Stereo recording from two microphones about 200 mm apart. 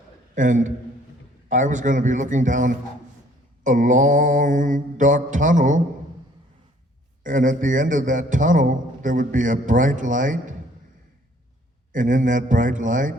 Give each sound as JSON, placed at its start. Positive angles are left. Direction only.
{"t": 0.3, "sound": "a man's voice", "side_deg": -40}
{"t": 7.3, "sound": "a man's voice", "side_deg": -40}
{"t": 11.9, "sound": "a man's voice", "side_deg": -40}